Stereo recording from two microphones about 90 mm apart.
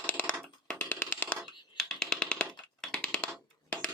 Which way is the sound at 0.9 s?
25° left (ahead or behind).